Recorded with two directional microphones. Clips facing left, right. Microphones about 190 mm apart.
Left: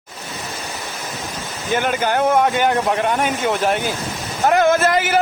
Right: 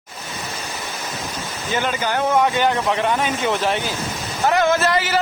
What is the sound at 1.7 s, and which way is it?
Speech, 50° left (ahead or behind).